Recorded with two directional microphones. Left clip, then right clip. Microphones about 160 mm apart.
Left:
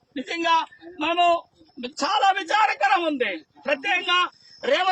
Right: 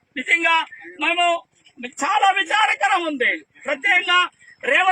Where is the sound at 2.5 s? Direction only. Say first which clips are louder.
Right 2 dB; 50° right (ahead or behind).